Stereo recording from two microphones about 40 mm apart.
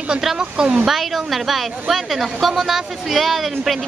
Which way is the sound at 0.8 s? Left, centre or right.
Centre.